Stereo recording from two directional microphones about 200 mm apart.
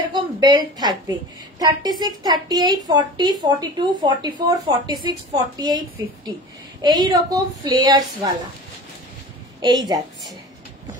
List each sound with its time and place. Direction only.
0.1 s a woman's voice: 20° right (ahead or behind)
9.8 s a woman's voice: 20° right (ahead or behind)